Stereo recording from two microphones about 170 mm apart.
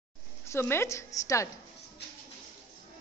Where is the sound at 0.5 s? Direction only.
15° left (ahead or behind).